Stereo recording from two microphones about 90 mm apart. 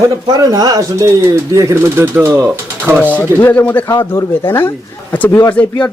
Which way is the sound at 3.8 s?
30° left (ahead or behind).